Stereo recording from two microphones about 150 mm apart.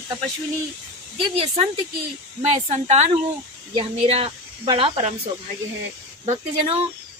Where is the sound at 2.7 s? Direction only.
50° right (ahead or behind).